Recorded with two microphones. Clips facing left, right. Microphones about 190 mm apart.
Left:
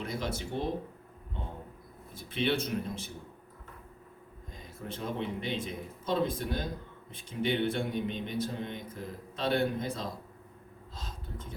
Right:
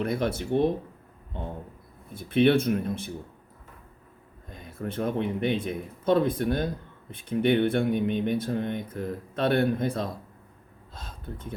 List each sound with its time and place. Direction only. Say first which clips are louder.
0.0 s speech: right 8 dB; 60° right (ahead or behind)
2.1 s speech: right 10 dB; 55° right (ahead or behind)
4.5 s speech: right 9 dB; 55° right (ahead or behind)
10.9 s a sound: right 4 dB; 55° right (ahead or behind)